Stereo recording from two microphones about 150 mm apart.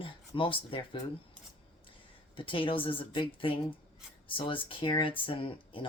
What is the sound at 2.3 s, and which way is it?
Speech, 35° left (ahead or behind).